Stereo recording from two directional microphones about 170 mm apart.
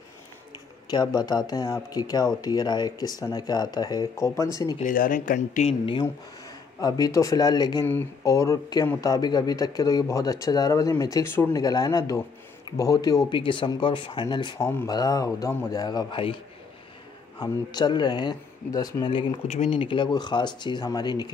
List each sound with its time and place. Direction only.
0.8 s speech: 25° left (ahead or behind)
4.7 s speech: 50° left (ahead or behind)
5.7 s speech: 30° left (ahead or behind)
6.8 s speech: 20° left (ahead or behind)
17.4 s speech: 25° left (ahead or behind)